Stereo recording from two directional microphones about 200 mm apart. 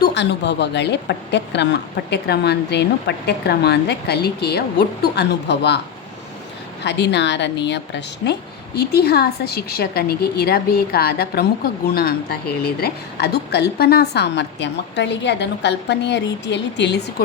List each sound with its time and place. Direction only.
0.0 s a woman's voice: 60° left (ahead or behind)
6.8 s a woman's voice: 60° left (ahead or behind)